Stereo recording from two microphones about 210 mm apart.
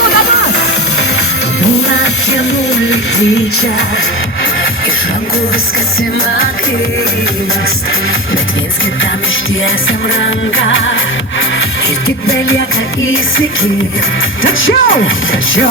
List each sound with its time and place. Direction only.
10.2 s music: 65° left (ahead or behind)
14.4 s speech: 70° left (ahead or behind)